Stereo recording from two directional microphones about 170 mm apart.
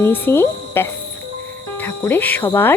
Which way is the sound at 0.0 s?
15° left (ahead or behind).